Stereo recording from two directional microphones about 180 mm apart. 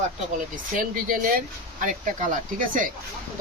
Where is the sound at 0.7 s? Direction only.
50° right (ahead or behind).